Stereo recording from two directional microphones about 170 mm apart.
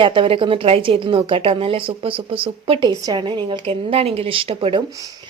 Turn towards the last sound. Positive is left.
turn(degrees=-30)  # may be behind; listen again after turning